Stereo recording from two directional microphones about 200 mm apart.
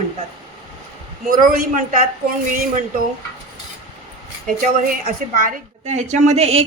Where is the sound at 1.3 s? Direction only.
40° right (ahead or behind).